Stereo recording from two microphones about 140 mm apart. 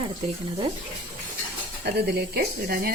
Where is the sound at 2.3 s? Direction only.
90° right.